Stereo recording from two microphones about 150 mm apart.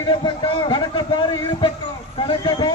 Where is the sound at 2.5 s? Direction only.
30° left (ahead or behind).